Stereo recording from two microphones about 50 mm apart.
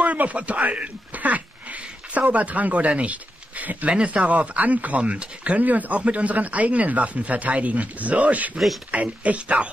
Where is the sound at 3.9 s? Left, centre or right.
Right.